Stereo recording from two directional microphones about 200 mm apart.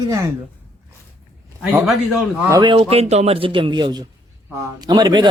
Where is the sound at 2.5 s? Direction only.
20° right (ahead or behind).